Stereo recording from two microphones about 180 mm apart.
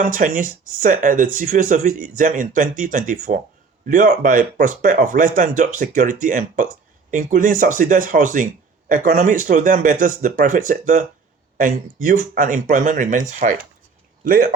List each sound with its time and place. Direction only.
0.0 s speech: 45° right (ahead or behind)